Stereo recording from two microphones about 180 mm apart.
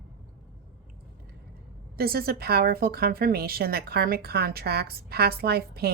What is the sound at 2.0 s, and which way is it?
A woman's voice, 55° right (ahead or behind).